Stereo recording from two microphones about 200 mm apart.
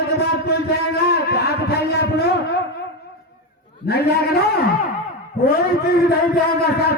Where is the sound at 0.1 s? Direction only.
55° left (ahead or behind).